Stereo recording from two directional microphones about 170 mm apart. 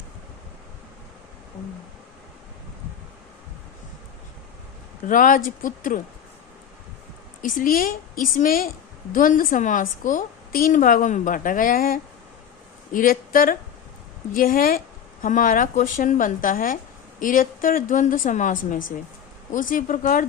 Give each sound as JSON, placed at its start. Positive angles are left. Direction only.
{"t": 5.0, "sound": "a woman's voice", "side_deg": 50}
{"t": 7.4, "sound": "a woman's voice", "side_deg": 55}